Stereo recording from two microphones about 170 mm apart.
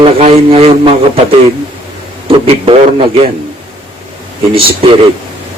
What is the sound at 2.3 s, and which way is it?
A man's voice, 35° right (ahead or behind).